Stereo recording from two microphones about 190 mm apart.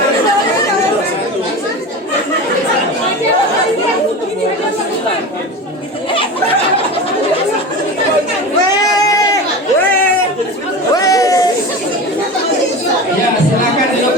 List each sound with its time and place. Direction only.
8.7 s sheep: 20° left (ahead or behind)
10.9 s chatter: 20° left (ahead or behind)